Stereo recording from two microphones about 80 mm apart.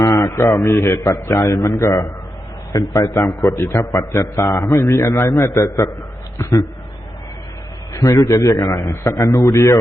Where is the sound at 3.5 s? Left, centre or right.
Left.